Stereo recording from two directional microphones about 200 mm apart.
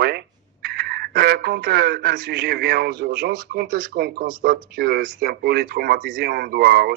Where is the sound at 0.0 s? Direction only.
50° right (ahead or behind).